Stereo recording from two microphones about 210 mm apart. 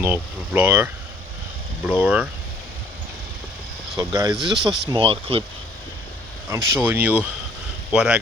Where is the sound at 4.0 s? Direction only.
15° right (ahead or behind).